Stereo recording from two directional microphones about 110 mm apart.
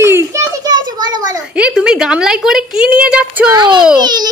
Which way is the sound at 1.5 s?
10° right (ahead or behind).